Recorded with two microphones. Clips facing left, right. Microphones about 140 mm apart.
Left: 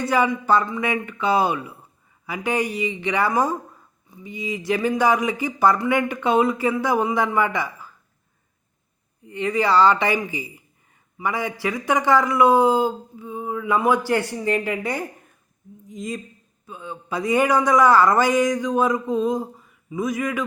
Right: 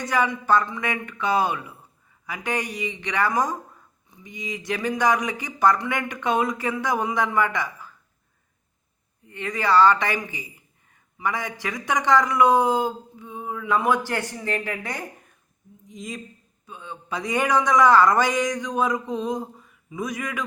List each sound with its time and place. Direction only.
0.1 s speech: 10° left (ahead or behind)
9.2 s speech: 10° left (ahead or behind)